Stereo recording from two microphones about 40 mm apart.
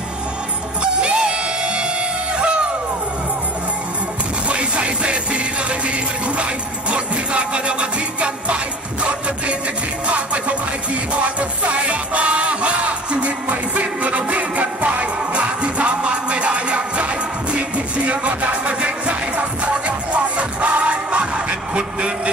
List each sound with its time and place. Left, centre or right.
0.9 s music: right
4.5 s music: right
10.0 s music: right
15.3 s music: right